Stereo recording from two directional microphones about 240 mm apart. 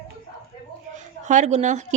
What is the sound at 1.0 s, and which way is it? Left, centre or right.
Speech, right.